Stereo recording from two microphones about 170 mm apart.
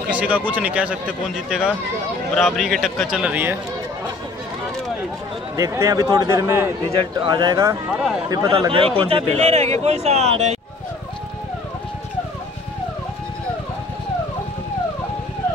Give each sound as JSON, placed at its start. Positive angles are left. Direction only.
{"t": 0.1, "sound": "a man's voice", "side_deg": -10}
{"t": 5.6, "sound": "speech", "side_deg": -15}
{"t": 6.9, "sound": "speech", "side_deg": -30}
{"t": 7.9, "sound": "a man's voice", "side_deg": 0}
{"t": 8.5, "sound": "speech", "side_deg": -30}